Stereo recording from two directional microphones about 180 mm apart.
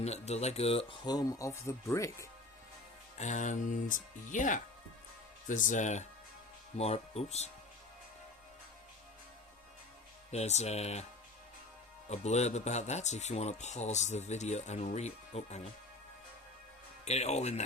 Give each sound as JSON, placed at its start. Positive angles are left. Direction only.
{"t": 0.0, "sound": "speech", "side_deg": 35}
{"t": 3.2, "sound": "speech", "side_deg": 40}
{"t": 10.3, "sound": "speech", "side_deg": 40}
{"t": 12.0, "sound": "speech", "side_deg": 40}
{"t": 17.1, "sound": "speech", "side_deg": 40}